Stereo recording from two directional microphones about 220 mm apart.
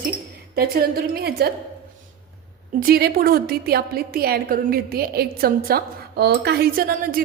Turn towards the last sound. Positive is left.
turn(degrees=-45)  # may be behind; listen again after turning